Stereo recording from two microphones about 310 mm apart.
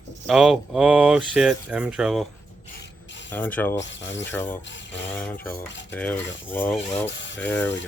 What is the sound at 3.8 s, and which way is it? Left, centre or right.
Speech, left.